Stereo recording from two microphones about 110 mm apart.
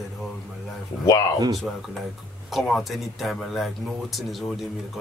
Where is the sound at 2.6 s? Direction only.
Centre (ahead or behind).